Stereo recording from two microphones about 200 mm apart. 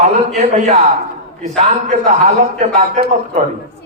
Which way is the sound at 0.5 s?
35° right (ahead or behind).